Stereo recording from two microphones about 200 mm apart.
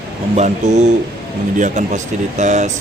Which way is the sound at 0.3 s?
35° right (ahead or behind).